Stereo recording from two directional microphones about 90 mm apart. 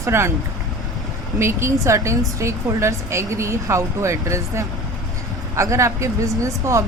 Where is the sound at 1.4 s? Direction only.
30° right (ahead or behind).